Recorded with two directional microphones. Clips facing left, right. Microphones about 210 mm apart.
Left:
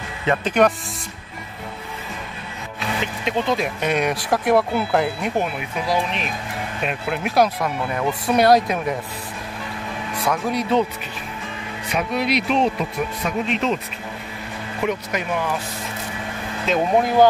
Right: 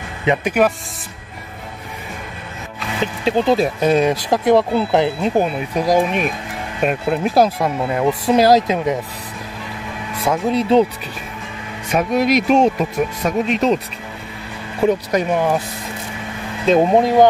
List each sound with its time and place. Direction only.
0.2 s speech: 15° right (ahead or behind)
3.3 s speech: 35° right (ahead or behind); by 6.3 s 50° right (ahead or behind)
7.1 s speech: 30° right (ahead or behind)
10.2 s speech: 25° right (ahead or behind)
11.9 s speech: 45° right (ahead or behind)
14.9 s speech: 35° right (ahead or behind)
16.6 s speech: 30° right (ahead or behind)